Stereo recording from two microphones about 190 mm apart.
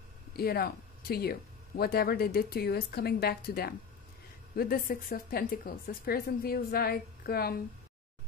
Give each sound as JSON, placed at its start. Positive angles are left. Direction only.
{"t": 0.4, "sound": "a woman's voice", "side_deg": 55}